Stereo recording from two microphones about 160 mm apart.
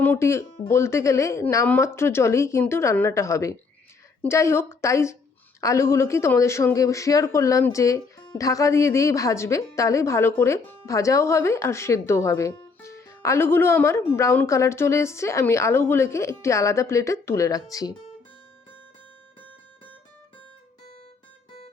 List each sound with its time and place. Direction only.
0.0 s speech: 15° left (ahead or behind)